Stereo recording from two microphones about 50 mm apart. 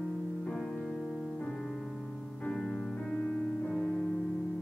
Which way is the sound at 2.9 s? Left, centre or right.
Left.